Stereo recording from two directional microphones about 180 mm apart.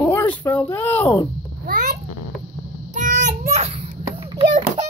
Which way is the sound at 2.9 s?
45° right (ahead or behind).